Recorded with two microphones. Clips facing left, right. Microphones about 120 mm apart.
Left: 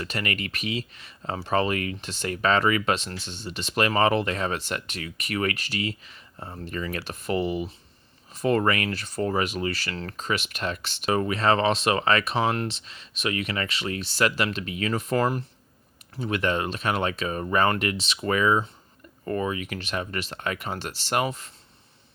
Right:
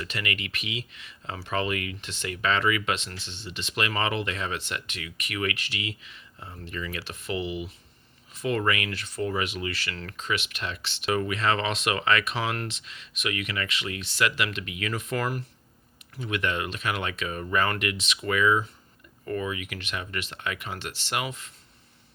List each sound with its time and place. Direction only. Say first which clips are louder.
0.0 s speech: left 3 dB; 40° left (ahead or behind)